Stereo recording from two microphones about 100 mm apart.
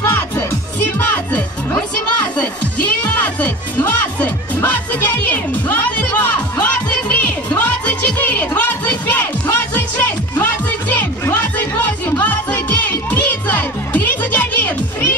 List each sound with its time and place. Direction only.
0.9 s music: 20° left (ahead or behind)
3.3 s music: 15° left (ahead or behind)